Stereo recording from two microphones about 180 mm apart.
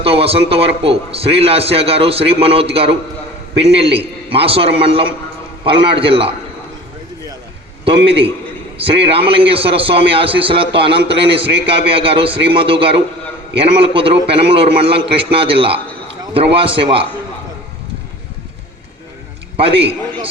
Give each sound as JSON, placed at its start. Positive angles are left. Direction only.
{"t": 0.0, "sound": "a man's voice", "side_deg": -30}
{"t": 3.5, "sound": "a man's voice", "side_deg": -70}
{"t": 3.9, "sound": "a man's voice", "side_deg": -30}
{"t": 7.9, "sound": "a man's voice", "side_deg": -30}
{"t": 19.5, "sound": "a man's voice", "side_deg": -30}